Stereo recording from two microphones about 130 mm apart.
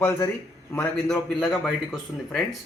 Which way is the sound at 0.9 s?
5° left (ahead or behind).